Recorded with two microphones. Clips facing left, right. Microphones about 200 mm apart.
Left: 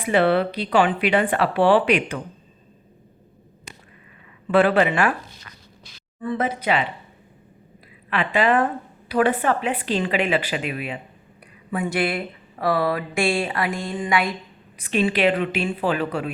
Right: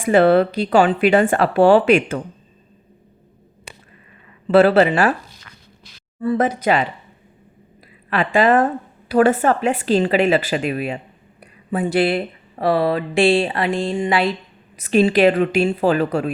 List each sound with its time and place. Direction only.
0.0 s speech: 45° right (ahead or behind)
4.5 s speech: 40° right (ahead or behind)
6.3 s speech: 45° right (ahead or behind)
8.1 s speech: 45° right (ahead or behind)
14.8 s speech: 40° right (ahead or behind)